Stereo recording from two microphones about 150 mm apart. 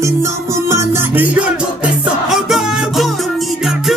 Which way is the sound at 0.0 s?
20° right (ahead or behind).